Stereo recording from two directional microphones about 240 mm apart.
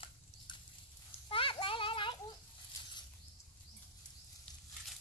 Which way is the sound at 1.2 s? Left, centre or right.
Left.